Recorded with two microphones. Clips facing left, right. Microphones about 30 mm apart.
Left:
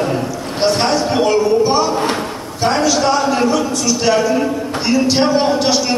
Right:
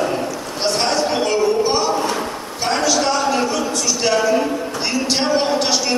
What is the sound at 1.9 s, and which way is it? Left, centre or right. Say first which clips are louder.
Speech: left 2 dB; left.